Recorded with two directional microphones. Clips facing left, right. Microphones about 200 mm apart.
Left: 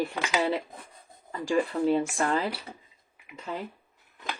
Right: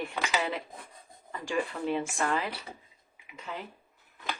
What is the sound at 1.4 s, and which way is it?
Speech, 40° left (ahead or behind).